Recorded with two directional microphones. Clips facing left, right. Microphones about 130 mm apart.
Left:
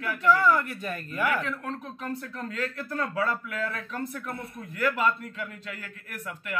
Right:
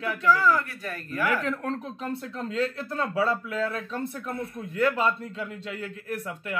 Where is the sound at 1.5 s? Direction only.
35° right (ahead or behind).